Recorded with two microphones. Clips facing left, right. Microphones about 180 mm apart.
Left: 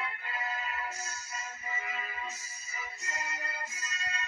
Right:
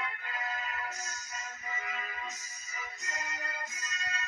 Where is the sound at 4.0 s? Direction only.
30° left (ahead or behind).